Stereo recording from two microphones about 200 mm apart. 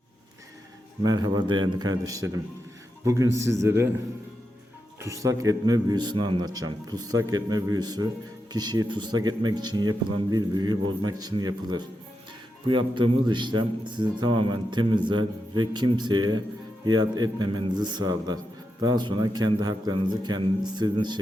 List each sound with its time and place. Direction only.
1.0 s a man's voice: 20° right (ahead or behind)
4.9 s a man's voice: 15° right (ahead or behind)